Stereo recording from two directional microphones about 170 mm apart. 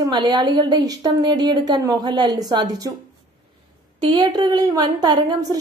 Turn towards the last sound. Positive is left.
turn(degrees=-25)  # may be behind; listen again after turning